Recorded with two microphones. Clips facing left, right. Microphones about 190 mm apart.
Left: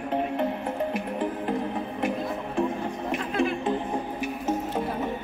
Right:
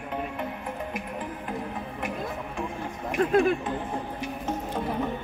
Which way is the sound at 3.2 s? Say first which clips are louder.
Right 7 dB; 50° right (ahead or behind).